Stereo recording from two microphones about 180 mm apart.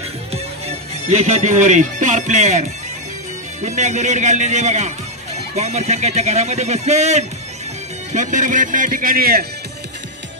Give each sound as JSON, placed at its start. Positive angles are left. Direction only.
{"t": 0.3, "sound": "speech", "side_deg": -35}
{"t": 3.6, "sound": "speech", "side_deg": -40}